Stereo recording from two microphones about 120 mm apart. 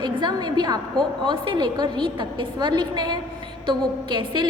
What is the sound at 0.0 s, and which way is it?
A woman's voice, 35° right (ahead or behind).